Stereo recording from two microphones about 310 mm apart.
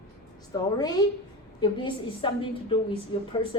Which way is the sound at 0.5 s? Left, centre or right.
Centre.